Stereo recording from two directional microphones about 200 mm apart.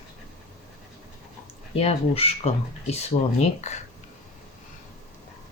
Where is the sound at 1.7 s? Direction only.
30° left (ahead or behind).